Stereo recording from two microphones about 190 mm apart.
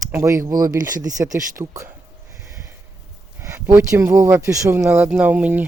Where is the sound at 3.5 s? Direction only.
10° right (ahead or behind).